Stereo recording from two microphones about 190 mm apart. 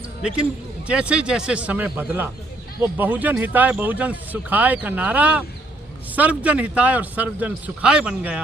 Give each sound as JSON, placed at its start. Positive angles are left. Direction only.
{"t": 0.9, "sound": "a man's voice", "side_deg": -5}